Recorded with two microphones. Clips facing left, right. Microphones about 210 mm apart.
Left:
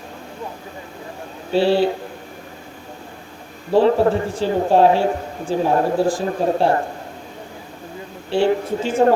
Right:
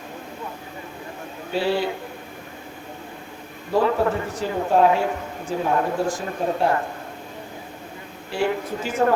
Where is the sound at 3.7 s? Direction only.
30° left (ahead or behind).